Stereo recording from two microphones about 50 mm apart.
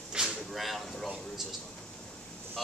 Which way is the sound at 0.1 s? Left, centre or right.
Centre.